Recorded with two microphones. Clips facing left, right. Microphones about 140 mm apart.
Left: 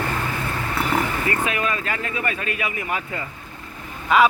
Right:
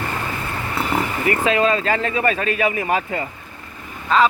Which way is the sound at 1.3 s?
25° right (ahead or behind).